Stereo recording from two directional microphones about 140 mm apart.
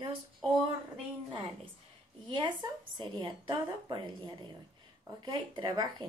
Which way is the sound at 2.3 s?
35° right (ahead or behind).